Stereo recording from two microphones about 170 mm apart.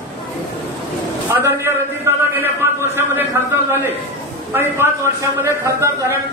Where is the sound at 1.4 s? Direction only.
15° right (ahead or behind).